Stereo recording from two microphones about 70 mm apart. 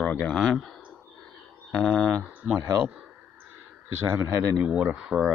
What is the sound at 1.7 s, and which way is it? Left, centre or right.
Speech, centre.